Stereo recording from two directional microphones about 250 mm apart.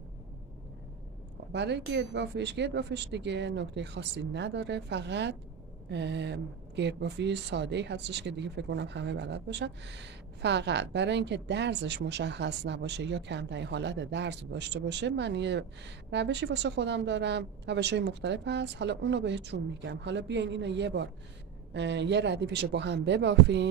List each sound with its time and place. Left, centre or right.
1.5 s a woman's voice: right